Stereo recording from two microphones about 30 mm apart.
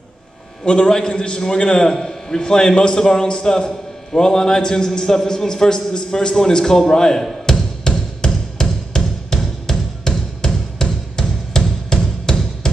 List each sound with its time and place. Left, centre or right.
0.7 s a man's voice: left
7.5 s music: left